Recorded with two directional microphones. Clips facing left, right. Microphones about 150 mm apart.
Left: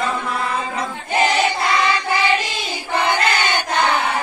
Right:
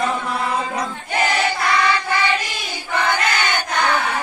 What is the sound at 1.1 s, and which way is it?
Choir, 25° left (ahead or behind).